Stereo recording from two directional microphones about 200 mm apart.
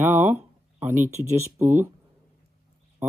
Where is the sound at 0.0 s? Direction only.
10° right (ahead or behind).